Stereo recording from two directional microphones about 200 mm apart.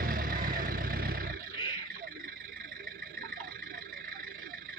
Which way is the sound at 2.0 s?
45° right (ahead or behind).